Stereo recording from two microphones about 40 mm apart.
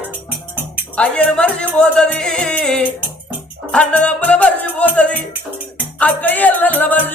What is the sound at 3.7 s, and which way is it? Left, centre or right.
Music, left.